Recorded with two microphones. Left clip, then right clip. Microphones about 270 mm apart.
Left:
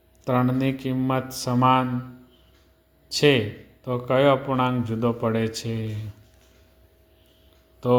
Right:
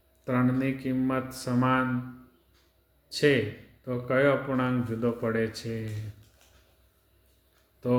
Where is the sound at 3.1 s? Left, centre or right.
Left.